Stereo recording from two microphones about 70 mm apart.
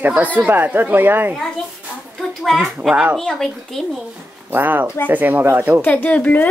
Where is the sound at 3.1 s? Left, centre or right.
Centre.